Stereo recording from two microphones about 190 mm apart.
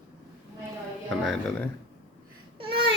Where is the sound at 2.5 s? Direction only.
30° right (ahead or behind).